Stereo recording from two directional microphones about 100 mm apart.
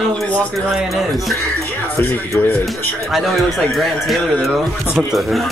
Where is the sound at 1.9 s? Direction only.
20° left (ahead or behind).